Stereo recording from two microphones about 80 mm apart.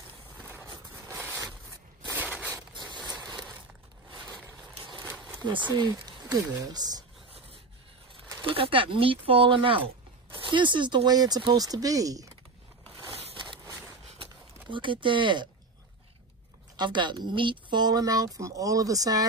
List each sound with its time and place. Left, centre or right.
1.1 s zipper: right
2.1 s a sound: centre
2.7 s zipper: right
5.5 s speech: right
6.5 s speech: right
8.4 s speech: right
14.2 s a sound: right
16.7 s speech: right